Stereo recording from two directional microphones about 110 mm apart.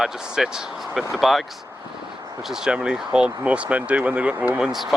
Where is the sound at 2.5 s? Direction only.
5° right (ahead or behind).